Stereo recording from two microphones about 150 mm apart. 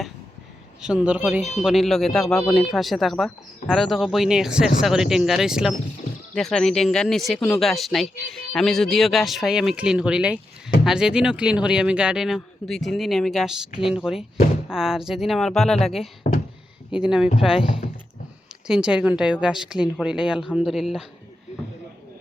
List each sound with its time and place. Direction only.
0.8 s speech: 5° right (ahead or behind)
1.6 s speech: centre (ahead or behind)
16.2 s a sound: 65° left (ahead or behind)
16.9 s speech: 5° right (ahead or behind)
18.7 s speech: 5° right (ahead or behind)